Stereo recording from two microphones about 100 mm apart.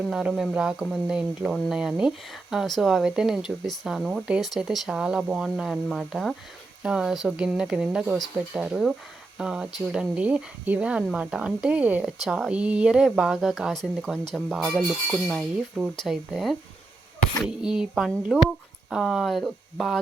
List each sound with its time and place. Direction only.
0.1 s speech: 5° right (ahead or behind)
14.6 s speech: 5° right (ahead or behind)
16.0 s speech: centre (ahead or behind)